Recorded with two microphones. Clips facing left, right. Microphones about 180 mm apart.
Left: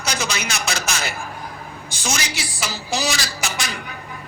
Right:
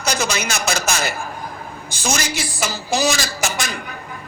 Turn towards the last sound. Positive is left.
turn(degrees=-45)  # may be behind; listen again after turning